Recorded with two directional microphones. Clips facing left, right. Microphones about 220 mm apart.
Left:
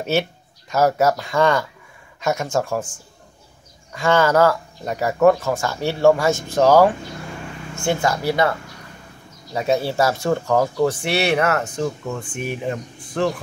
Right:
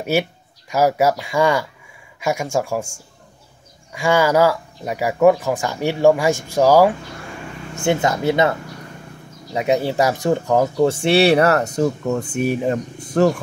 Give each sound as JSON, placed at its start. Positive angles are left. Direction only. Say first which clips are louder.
{"t": 0.0, "sound": "speech", "louder": "right 1 dB", "side_deg": -10}